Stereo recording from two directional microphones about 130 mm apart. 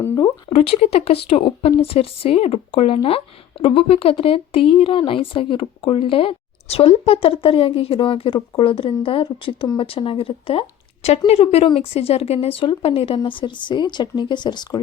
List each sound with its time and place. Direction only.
0.5 s speech: 50° left (ahead or behind); by 14.8 s 35° left (ahead or behind)